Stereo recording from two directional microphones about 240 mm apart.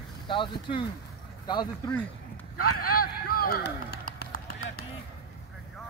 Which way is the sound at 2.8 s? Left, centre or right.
Left.